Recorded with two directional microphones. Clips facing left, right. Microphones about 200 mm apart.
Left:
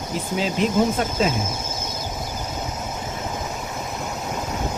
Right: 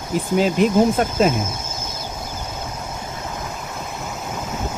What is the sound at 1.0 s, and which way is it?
Speech, 50° right (ahead or behind).